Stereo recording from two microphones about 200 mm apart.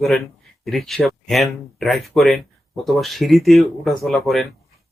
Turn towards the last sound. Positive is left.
turn(degrees=0)  # may be behind; listen again after turning